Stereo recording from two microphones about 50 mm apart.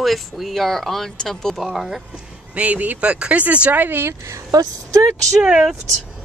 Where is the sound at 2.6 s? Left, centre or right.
Right.